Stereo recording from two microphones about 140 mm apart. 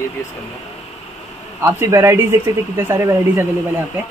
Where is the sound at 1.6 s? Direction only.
20° right (ahead or behind).